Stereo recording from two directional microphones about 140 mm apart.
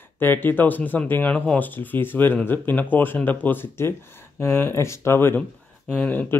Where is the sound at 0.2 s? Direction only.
15° left (ahead or behind).